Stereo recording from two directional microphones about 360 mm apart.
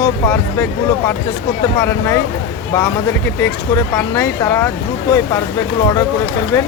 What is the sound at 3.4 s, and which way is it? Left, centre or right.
Speech, centre.